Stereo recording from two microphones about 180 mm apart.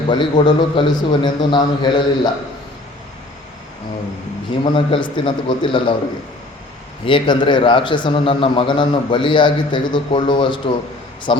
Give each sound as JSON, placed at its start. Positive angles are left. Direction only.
{"t": 0.1, "sound": "a man's voice", "side_deg": 25}
{"t": 4.6, "sound": "a man's voice", "side_deg": 30}
{"t": 7.0, "sound": "a man's voice", "side_deg": 30}